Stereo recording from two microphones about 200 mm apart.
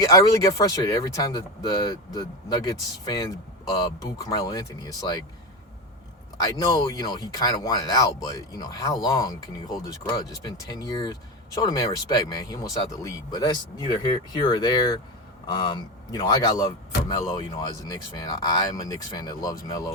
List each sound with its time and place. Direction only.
0.0 s speech: 15° left (ahead or behind)
6.3 s a man's voice: 20° left (ahead or behind)